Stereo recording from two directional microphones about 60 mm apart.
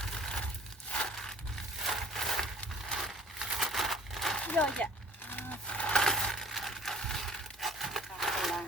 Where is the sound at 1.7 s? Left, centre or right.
Centre.